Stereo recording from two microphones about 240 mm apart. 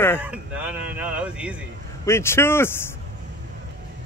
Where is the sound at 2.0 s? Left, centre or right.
Centre.